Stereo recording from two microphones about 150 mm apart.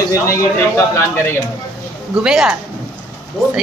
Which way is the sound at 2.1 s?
5° right (ahead or behind).